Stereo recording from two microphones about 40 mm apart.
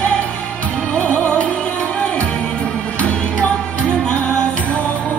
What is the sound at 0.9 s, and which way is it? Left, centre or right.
Music, left.